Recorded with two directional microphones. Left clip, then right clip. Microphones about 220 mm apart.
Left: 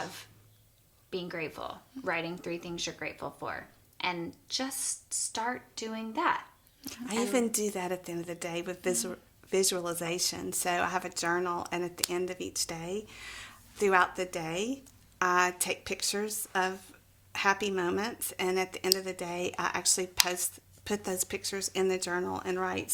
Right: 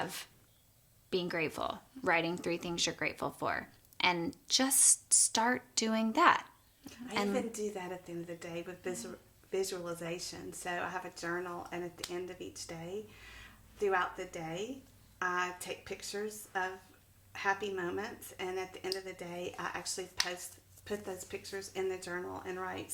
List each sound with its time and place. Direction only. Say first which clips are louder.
1.1 s a woman's voice: right 2 dB; 50° right (ahead or behind)
7.3 s a woman's voice: left 7 dB; 45° left (ahead or behind)